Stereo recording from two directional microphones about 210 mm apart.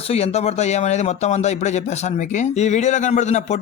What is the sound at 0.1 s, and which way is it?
A man's voice, 30° left (ahead or behind).